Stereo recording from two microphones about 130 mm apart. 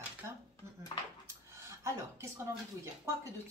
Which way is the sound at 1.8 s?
20° right (ahead or behind).